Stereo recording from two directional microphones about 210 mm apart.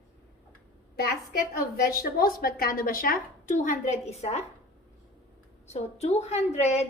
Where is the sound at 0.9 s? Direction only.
50° left (ahead or behind); by 4.4 s 30° left (ahead or behind).